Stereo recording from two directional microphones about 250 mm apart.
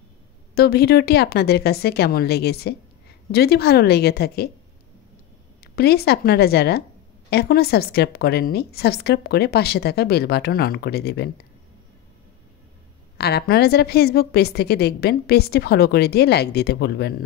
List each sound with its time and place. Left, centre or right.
0.6 s a woman's voice: left
5.6 s a woman's voice: left
13.2 s a woman's voice: left